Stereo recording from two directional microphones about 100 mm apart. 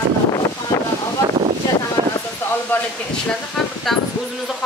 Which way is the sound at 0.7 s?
30° left (ahead or behind).